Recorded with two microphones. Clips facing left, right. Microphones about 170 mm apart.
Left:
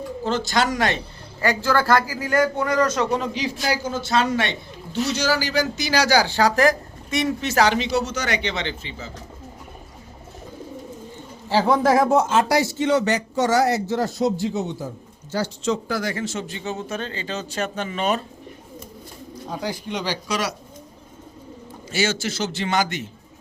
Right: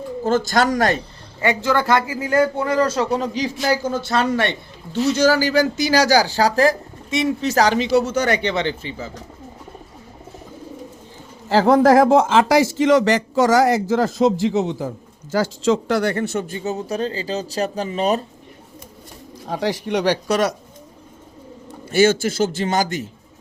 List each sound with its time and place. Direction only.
0.3 s speech: 45° right (ahead or behind)
1.4 s a man's voice: 20° right (ahead or behind)
3.2 s a man's voice: 40° right (ahead or behind)
8.6 s speech: 20° left (ahead or behind)
11.4 s speech: 90° right; by 18.2 s 35° right (ahead or behind)
19.5 s speech: 80° right; by 20.5 s 55° right (ahead or behind)
21.8 s speech: 50° right (ahead or behind)